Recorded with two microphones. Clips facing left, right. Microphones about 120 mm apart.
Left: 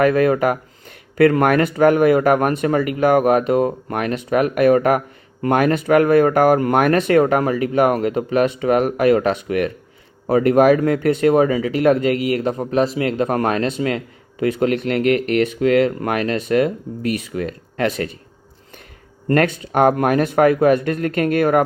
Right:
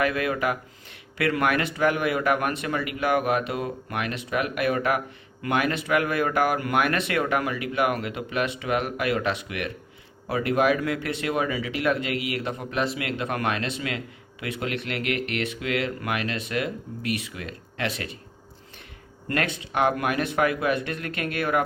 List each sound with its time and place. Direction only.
0.0 s speech: 40° left (ahead or behind)
19.3 s speech: 45° left (ahead or behind)